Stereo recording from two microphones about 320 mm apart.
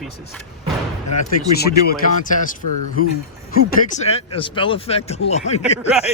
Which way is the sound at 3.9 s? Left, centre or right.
Centre.